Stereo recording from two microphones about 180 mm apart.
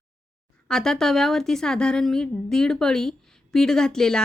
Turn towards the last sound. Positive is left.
turn(degrees=5)  # may be behind; listen again after turning